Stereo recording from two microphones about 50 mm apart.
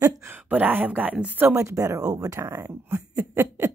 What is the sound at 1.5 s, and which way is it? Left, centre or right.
Speech, right.